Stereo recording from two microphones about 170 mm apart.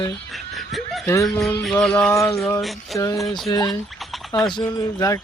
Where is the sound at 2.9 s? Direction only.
20° left (ahead or behind).